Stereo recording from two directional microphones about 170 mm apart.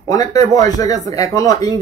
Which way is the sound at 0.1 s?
20° left (ahead or behind).